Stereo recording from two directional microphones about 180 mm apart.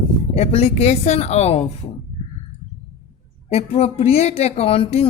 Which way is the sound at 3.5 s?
35° left (ahead or behind).